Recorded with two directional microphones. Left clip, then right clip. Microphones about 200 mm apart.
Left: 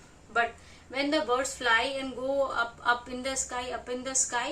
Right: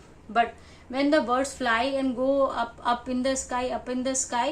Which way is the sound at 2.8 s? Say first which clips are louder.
Right 6 dB; 45° right (ahead or behind).